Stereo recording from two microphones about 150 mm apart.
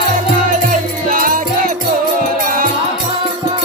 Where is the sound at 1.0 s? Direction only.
65° right (ahead or behind).